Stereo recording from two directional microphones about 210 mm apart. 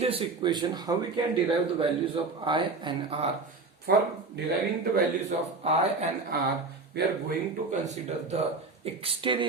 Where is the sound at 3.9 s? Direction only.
45° right (ahead or behind).